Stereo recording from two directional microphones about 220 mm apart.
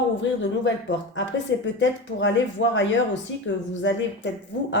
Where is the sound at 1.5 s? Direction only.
55° left (ahead or behind).